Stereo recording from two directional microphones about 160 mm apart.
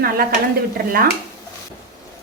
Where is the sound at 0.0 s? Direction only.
70° right (ahead or behind).